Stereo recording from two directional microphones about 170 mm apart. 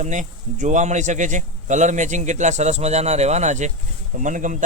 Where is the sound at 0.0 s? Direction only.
45° right (ahead or behind).